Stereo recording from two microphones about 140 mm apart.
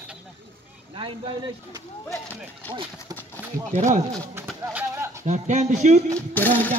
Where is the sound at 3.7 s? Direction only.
60° right (ahead or behind).